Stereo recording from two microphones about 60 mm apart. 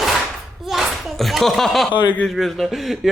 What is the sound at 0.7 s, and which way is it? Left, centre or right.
Slap, centre.